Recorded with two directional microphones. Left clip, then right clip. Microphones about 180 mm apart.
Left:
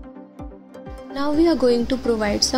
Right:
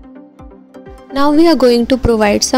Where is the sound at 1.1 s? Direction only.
50° right (ahead or behind).